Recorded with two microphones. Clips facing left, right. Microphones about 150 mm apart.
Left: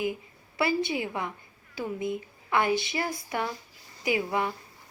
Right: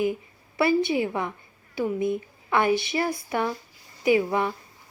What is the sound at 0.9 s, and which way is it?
A woman's voice, 25° right (ahead or behind).